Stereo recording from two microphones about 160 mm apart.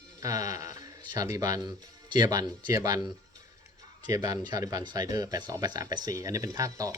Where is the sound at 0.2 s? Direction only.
20° right (ahead or behind).